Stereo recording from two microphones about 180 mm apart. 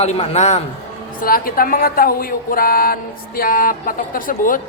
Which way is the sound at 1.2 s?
55° left (ahead or behind).